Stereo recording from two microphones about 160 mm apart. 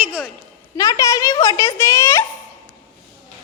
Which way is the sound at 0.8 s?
20° left (ahead or behind).